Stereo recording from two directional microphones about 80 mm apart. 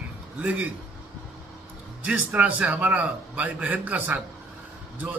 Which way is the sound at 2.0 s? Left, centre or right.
Centre.